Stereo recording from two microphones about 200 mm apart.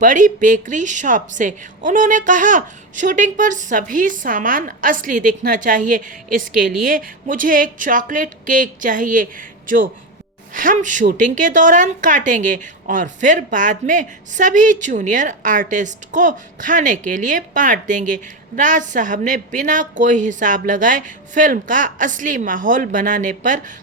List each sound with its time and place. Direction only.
0.0 s a woman's voice: 40° right (ahead or behind)